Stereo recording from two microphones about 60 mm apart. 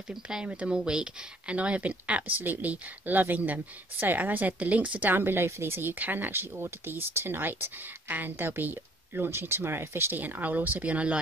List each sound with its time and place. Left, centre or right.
0.1 s speech: centre